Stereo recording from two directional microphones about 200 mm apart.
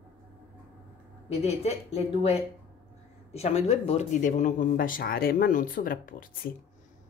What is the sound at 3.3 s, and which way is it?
Speech, 30° left (ahead or behind).